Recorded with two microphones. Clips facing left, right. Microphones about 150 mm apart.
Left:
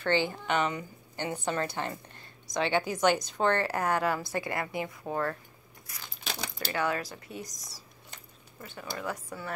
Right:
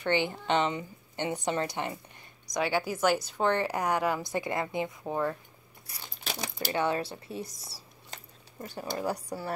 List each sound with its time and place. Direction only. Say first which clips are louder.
0.0 s a woman's voice: even; 15° right (ahead or behind)
2.7 s a woman's voice: left 1 dB; 5° right (ahead or behind)
5.9 s speech: right 1 dB; 30° right (ahead or behind)